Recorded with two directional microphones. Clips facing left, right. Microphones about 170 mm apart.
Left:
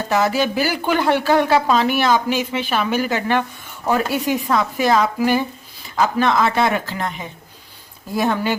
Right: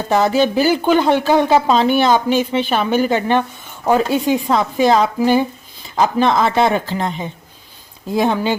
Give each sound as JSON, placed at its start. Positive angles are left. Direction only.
{"t": 0.1, "sound": "a woman's voice", "side_deg": -25}